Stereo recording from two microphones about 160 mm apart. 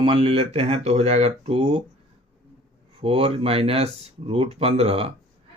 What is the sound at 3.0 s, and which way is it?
Speech, 35° right (ahead or behind).